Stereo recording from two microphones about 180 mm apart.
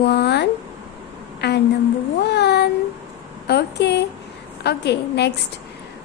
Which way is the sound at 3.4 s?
65° left (ahead or behind).